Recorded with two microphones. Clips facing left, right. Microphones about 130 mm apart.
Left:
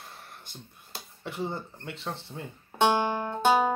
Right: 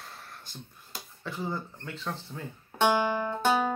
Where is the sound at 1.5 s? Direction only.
30° left (ahead or behind).